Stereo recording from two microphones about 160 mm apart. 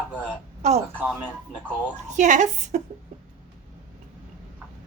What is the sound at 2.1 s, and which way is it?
Speech, 50° right (ahead or behind).